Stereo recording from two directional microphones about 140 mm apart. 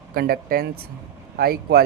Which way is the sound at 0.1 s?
90° right.